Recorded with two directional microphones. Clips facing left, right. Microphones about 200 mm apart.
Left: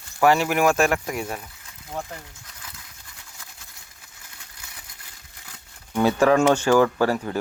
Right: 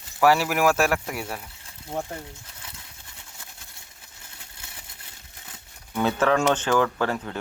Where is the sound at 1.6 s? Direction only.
30° right (ahead or behind).